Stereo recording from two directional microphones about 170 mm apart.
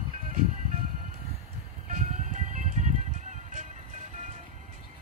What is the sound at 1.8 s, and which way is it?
Music, 45° right (ahead or behind).